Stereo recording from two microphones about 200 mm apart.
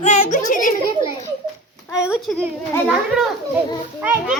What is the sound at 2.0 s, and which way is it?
A child's voice, 5° right (ahead or behind).